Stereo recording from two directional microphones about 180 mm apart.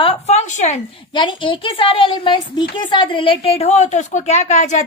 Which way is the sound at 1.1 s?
25° left (ahead or behind).